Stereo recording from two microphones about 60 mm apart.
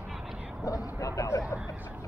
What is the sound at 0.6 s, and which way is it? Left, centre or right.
Vehicle, left.